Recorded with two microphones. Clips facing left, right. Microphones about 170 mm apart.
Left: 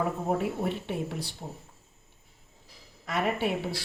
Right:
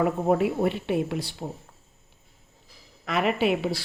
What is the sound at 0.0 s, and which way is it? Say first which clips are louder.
Speech: right 6 dB; 85° right.